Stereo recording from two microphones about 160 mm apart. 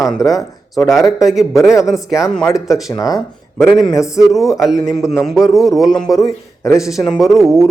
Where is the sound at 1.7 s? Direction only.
20° left (ahead or behind).